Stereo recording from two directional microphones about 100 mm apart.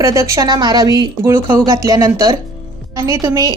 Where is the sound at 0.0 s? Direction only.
30° right (ahead or behind).